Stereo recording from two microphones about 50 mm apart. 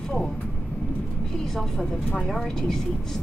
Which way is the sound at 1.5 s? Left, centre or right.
Centre.